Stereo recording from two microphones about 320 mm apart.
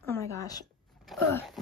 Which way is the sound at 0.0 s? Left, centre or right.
Centre.